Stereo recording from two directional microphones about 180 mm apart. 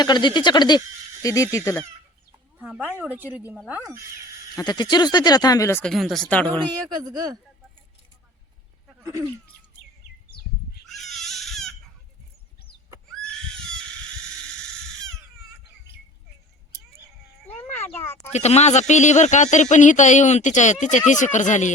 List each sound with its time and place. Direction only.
0.0 s speech: 25° left (ahead or behind)
2.6 s speech: 10° right (ahead or behind)
4.5 s speech: 20° left (ahead or behind)
5.8 s speech: centre (ahead or behind)
9.0 s a sound: 15° right (ahead or behind)
10.9 s crying: centre (ahead or behind)
17.6 s a sound: 10° left (ahead or behind)
18.3 s speech: 40° left (ahead or behind)